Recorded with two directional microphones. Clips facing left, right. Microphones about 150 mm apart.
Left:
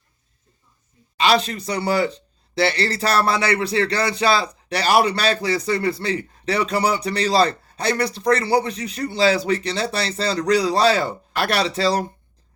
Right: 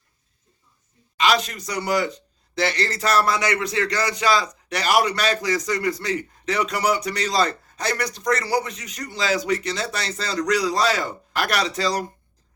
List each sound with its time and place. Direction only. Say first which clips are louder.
1.1 s speech: left 2 dB; 30° left (ahead or behind)